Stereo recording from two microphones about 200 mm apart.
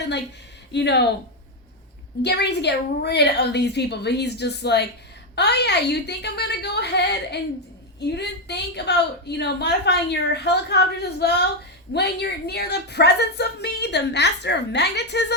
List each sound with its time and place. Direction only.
0.7 s a woman's voice: 60° left (ahead or behind)
2.2 s a woman's voice: 60° left (ahead or behind)